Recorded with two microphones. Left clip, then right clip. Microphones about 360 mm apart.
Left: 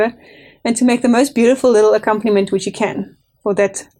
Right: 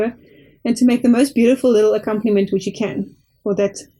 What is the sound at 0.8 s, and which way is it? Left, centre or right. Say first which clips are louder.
Speech: left 2 dB; left.